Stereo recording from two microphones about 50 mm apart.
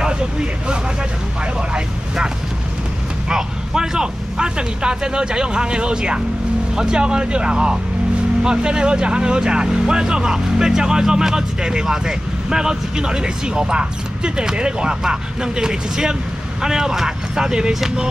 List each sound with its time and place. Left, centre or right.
1.4 s speech: centre